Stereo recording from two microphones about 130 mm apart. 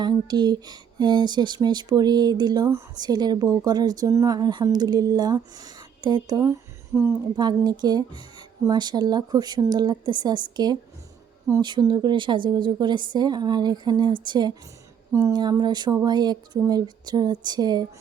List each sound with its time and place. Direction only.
0.0 s speech: 35° right (ahead or behind)
7.3 s speech: 30° right (ahead or behind)